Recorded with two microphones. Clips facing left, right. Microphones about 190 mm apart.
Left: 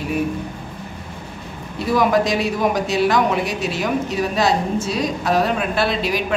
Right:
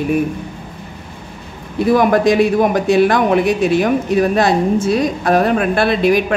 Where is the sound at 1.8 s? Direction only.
55° right (ahead or behind).